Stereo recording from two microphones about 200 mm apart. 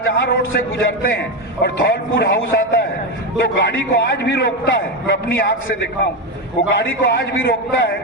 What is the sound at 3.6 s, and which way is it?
A man's voice, 60° left (ahead or behind).